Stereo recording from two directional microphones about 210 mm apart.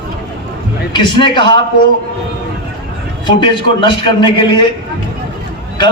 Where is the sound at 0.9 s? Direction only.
20° left (ahead or behind).